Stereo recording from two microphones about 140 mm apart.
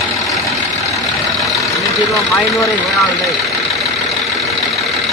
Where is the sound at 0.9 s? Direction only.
Centre (ahead or behind).